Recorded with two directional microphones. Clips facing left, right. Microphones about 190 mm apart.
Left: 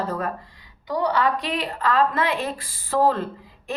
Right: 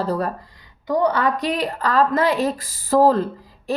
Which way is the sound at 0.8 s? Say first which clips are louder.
Right 3 dB; 45° right (ahead or behind).